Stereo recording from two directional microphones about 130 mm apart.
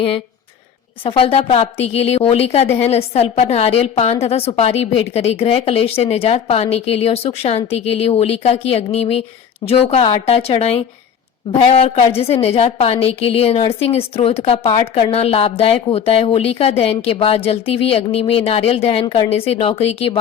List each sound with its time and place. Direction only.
1.0 s a woman's voice: 45° left (ahead or behind)